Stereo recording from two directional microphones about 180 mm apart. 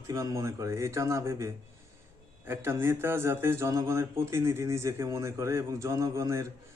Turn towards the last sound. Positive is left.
turn(degrees=-15)  # may be behind; listen again after turning